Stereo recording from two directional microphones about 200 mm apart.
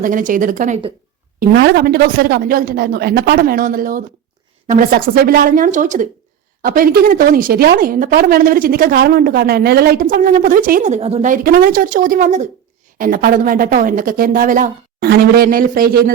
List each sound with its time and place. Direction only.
0.0 s a woman's voice: 40° right (ahead or behind)
1.4 s a woman's voice: 55° right (ahead or behind)